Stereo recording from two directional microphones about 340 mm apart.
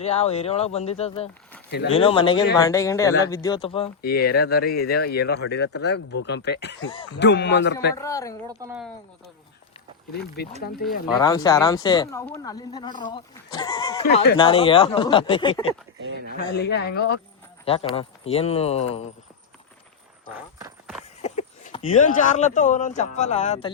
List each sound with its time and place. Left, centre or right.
0.0 s speech: centre
4.0 s speech: left
6.8 s speech: centre
7.1 s speech: left
7.9 s speech: centre
8.4 s speech: centre
10.1 s speech: left
11.0 s speech: centre
14.0 s speech: left
16.0 s speech: right
16.6 s speech: left
17.9 s speech: centre
21.2 s speech: left